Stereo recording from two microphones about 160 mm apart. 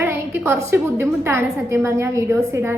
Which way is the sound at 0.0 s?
15° right (ahead or behind).